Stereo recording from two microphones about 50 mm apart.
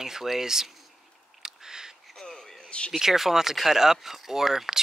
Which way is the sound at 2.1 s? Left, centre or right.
Centre.